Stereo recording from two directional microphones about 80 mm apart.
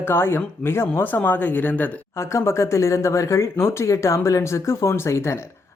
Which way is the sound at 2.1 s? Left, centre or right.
Left.